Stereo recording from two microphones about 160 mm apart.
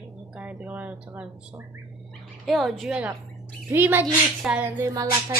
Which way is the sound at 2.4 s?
Centre (ahead or behind).